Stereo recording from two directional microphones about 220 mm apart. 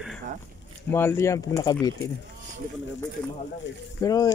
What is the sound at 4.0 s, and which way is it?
Speech, 15° left (ahead or behind).